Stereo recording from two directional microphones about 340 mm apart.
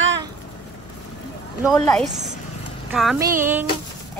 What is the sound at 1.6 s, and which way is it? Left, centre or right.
Speech, centre.